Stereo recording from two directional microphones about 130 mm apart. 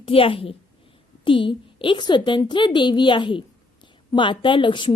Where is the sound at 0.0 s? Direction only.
45° left (ahead or behind).